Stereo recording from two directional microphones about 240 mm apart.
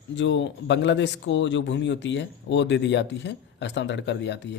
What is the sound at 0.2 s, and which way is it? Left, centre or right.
Speech, left.